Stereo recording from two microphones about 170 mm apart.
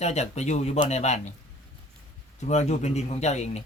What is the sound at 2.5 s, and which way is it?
Speech, 40° left (ahead or behind).